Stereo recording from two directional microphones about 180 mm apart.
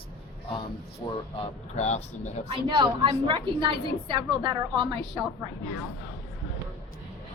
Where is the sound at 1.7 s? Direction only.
40° left (ahead or behind).